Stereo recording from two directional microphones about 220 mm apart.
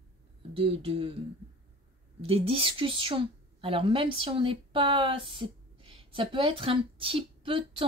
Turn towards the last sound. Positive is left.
turn(degrees=-25)  # may be behind; listen again after turning